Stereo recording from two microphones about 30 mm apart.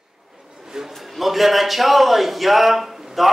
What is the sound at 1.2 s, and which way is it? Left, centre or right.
A man's voice, centre.